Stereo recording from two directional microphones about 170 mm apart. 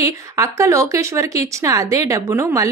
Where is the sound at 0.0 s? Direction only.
20° right (ahead or behind).